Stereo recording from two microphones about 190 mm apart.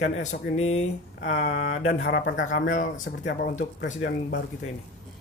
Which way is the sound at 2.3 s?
45° left (ahead or behind).